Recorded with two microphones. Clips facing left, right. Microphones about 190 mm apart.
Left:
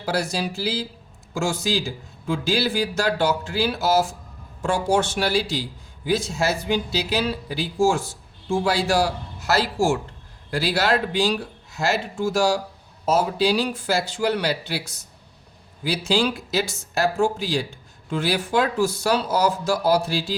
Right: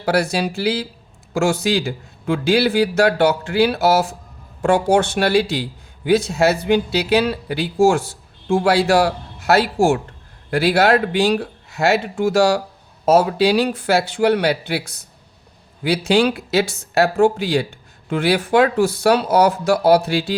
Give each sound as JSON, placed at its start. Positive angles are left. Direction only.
{"t": 0.0, "sound": "speech", "side_deg": -65}